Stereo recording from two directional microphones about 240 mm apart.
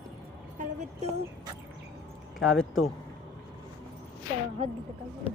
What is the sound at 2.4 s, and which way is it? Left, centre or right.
Speech, centre.